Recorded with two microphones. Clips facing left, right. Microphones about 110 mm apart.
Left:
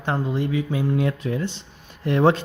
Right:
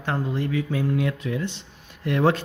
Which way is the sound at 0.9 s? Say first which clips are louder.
Left 2 dB; 30° left (ahead or behind).